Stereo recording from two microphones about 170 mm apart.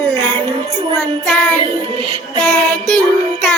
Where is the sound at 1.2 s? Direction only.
5° left (ahead or behind).